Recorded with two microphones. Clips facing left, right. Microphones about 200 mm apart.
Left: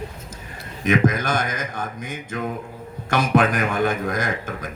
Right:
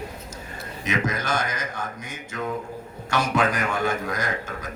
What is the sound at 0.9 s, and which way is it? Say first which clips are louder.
A man's voice: left 7 dB; 50° left (ahead or behind).